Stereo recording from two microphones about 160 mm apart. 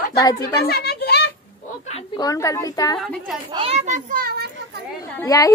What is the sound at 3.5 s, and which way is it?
Speech, 40° right (ahead or behind).